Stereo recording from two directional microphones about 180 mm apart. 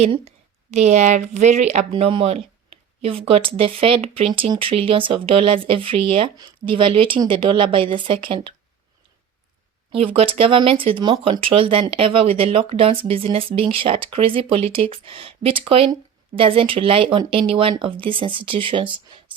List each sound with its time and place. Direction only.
0.0 s speech: 35° right (ahead or behind)
9.9 s speech: 30° right (ahead or behind)